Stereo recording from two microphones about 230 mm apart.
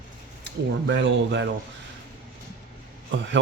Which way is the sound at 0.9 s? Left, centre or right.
Right.